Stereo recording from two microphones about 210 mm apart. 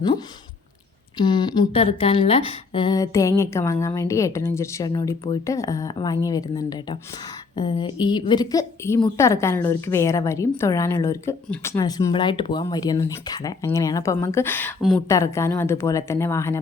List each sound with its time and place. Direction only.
1.2 s a woman's voice: 20° left (ahead or behind)
14.8 s a woman's voice: centre (ahead or behind)
15.1 s a woman's voice: 15° left (ahead or behind)